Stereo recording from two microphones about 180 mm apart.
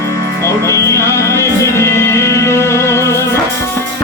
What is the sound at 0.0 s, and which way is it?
Music, 15° left (ahead or behind).